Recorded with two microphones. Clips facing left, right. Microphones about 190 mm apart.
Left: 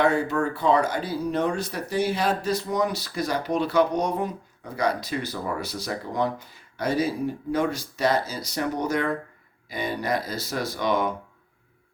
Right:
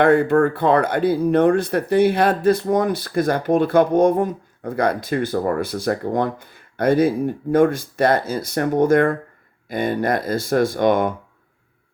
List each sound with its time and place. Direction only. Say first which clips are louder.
0.0 s speech: right 8 dB; 55° right (ahead or behind)